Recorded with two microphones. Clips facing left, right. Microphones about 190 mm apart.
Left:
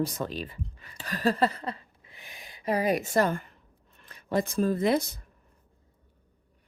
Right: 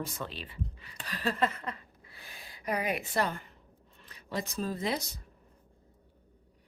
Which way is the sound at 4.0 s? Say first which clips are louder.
Left 8 dB; 50° left (ahead or behind).